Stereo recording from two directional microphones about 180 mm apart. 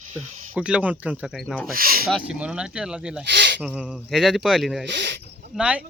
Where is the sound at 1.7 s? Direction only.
55° right (ahead or behind).